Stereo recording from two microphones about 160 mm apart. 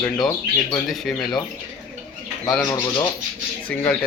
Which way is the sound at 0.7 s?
Centre (ahead or behind).